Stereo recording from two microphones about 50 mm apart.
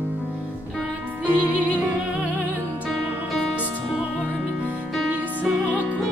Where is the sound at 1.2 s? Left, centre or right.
Right.